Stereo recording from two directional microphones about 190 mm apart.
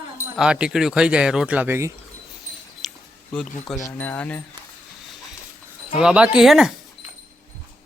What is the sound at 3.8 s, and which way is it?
Speech, 10° left (ahead or behind).